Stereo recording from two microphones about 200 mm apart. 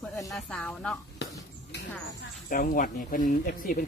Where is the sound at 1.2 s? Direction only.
60° left (ahead or behind).